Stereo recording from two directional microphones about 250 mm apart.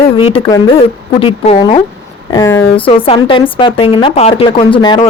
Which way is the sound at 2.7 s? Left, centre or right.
Left.